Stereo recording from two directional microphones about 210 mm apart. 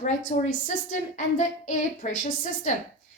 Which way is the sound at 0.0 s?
35° left (ahead or behind).